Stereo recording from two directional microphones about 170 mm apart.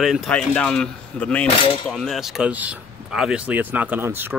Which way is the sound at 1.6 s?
30° left (ahead or behind).